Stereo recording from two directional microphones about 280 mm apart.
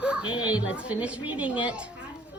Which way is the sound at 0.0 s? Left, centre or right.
Centre.